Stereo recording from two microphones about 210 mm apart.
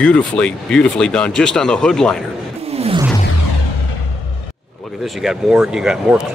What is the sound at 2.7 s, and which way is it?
Music, 30° right (ahead or behind).